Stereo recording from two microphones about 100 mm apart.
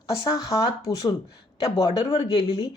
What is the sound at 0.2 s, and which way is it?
Speech, 45° left (ahead or behind).